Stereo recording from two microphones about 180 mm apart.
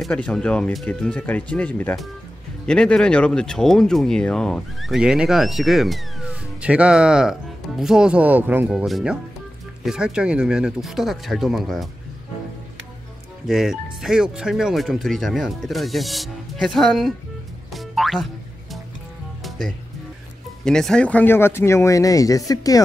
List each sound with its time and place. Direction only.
0.0 s speech: 5° left (ahead or behind)
13.5 s speech: centre (ahead or behind)
17.7 s music: centre (ahead or behind)
20.6 s speech: 5° left (ahead or behind); by 22.8 s 20° left (ahead or behind)